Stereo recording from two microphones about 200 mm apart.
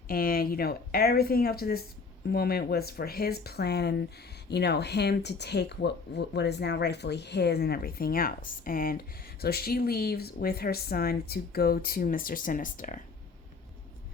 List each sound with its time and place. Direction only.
0.1 s speech: 45° left (ahead or behind)